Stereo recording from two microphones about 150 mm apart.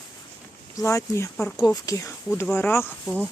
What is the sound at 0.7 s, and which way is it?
Speech, 20° left (ahead or behind).